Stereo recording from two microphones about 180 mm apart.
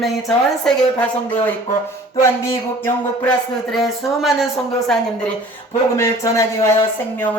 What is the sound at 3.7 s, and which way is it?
Speech, centre (ahead or behind).